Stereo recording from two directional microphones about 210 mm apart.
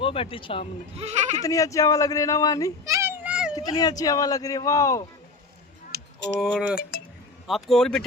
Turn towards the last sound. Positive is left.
turn(degrees=0)  # may be behind; listen again after turning